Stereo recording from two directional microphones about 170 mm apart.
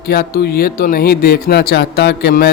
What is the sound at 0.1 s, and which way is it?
Speech, 65° left (ahead or behind).